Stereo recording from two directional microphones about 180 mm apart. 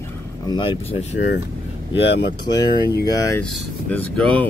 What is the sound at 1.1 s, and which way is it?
Speech, 75° left (ahead or behind).